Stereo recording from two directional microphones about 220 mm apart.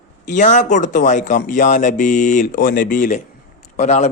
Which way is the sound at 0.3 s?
35° left (ahead or behind).